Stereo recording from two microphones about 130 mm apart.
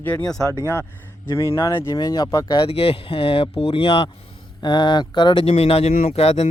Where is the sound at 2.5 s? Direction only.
45° left (ahead or behind).